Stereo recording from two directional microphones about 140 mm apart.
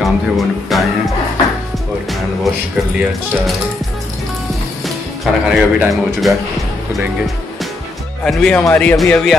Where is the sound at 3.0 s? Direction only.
5° right (ahead or behind).